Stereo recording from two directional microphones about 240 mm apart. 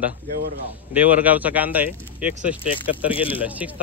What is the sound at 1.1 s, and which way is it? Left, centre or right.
Speech, centre.